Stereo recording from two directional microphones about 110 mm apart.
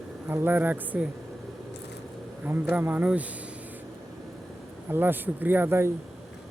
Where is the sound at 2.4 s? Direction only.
15° right (ahead or behind).